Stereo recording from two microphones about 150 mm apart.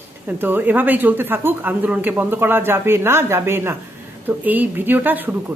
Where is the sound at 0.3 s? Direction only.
10° right (ahead or behind).